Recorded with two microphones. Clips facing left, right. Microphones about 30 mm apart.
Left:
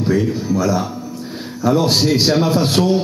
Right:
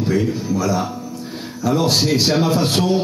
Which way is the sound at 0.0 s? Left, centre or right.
Centre.